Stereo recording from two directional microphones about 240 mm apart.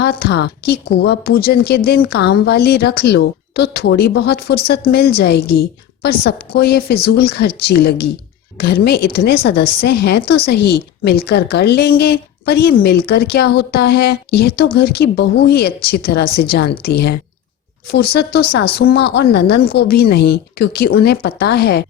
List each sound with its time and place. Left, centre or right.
0.0 s a woman's voice: left